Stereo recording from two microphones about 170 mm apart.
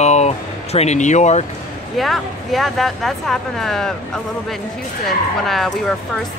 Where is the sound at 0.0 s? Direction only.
40° left (ahead or behind).